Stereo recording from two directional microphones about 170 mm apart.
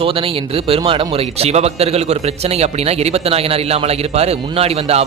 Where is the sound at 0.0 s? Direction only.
30° right (ahead or behind).